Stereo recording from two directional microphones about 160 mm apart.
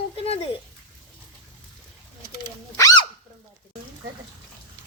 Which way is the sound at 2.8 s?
20° left (ahead or behind).